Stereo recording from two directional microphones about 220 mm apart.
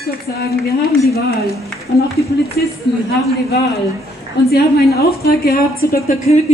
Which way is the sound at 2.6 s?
50° left (ahead or behind).